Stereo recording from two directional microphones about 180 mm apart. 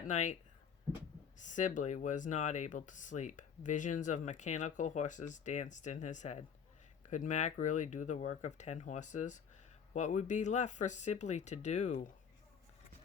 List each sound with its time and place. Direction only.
0.1 s speech: 40° left (ahead or behind)
1.4 s speech: 45° left (ahead or behind)